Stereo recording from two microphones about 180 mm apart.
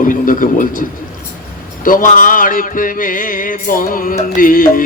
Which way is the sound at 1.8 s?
50° left (ahead or behind).